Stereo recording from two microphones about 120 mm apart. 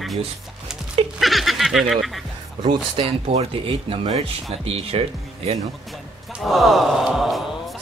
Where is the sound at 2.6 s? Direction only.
45° right (ahead or behind).